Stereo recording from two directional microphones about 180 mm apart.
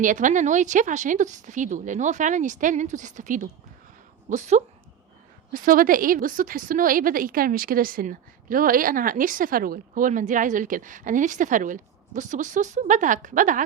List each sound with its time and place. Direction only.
0.0 s a woman's voice: 45° right (ahead or behind)